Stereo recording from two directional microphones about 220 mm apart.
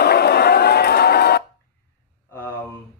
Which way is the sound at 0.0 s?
45° left (ahead or behind).